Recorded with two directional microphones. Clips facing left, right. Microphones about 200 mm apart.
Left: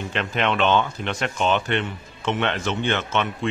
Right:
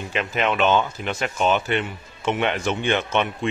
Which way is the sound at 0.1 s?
5° right (ahead or behind).